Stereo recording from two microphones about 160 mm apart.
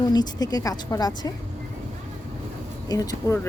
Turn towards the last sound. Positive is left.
turn(degrees=25)  # may be behind; listen again after turning